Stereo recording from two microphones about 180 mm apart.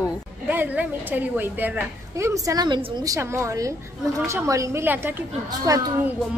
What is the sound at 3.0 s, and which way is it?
A woman's voice, 15° right (ahead or behind).